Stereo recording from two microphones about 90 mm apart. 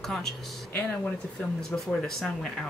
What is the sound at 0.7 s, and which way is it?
Speech, 15° left (ahead or behind).